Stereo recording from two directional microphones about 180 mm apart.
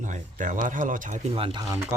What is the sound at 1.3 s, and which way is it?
Speech, 30° right (ahead or behind).